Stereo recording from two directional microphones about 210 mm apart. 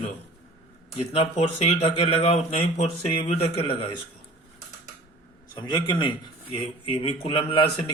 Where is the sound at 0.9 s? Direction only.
30° left (ahead or behind).